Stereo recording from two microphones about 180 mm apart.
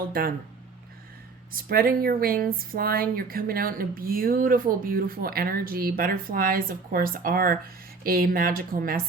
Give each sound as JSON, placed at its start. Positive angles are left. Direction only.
{"t": 0.1, "sound": "speech", "side_deg": -55}
{"t": 1.7, "sound": "speech", "side_deg": -55}